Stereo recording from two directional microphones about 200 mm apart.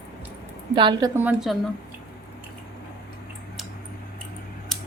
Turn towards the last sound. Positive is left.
turn(degrees=0)  # may be behind; listen again after turning